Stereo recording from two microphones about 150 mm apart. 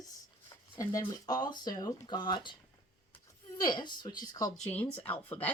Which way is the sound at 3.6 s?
30° left (ahead or behind).